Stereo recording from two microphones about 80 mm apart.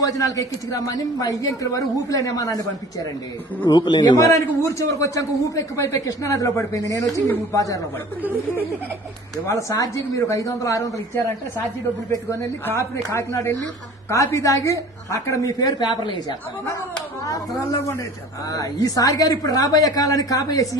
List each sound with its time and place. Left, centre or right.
0.0 s a man's voice: left
3.7 s a man's voice: left
4.2 s a man's voice: left
9.5 s a man's voice: left
12.3 s a man's voice: left
17.7 s a man's voice: left